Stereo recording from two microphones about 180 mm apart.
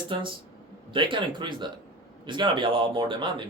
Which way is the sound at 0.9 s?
25° right (ahead or behind).